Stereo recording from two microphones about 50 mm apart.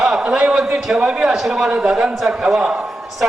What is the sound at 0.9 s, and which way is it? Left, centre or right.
A man's voice, centre.